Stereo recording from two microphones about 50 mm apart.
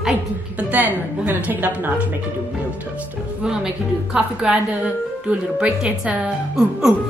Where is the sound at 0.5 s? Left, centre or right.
Right.